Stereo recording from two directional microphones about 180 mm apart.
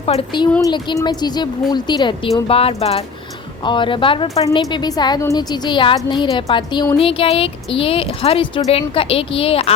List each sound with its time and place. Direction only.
0.0 s a woman's voice: 30° left (ahead or behind)